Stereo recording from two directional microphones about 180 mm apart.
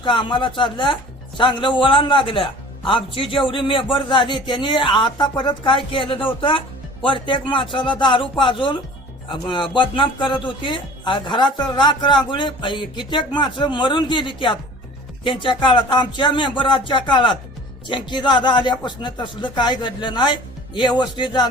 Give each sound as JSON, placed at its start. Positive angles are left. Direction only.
{"t": 0.0, "sound": "a man's voice", "side_deg": 25}